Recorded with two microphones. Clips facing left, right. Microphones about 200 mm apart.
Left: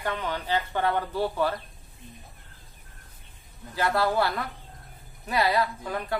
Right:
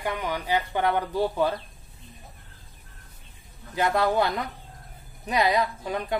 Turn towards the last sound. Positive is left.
turn(degrees=-20)  # may be behind; listen again after turning